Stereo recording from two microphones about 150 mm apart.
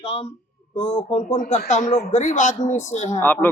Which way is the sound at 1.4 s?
55° left (ahead or behind).